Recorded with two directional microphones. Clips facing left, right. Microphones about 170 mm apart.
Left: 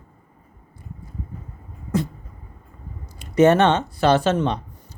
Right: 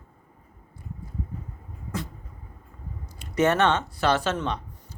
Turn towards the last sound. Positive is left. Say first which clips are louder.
# left 7 dB
turn(degrees=25)  # may be behind; listen again after turning